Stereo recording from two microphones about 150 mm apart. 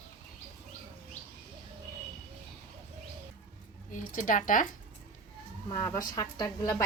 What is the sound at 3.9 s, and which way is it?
Speech, 60° left (ahead or behind).